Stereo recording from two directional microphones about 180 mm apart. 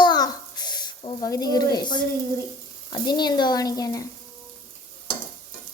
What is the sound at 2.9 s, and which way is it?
Speech, 25° left (ahead or behind).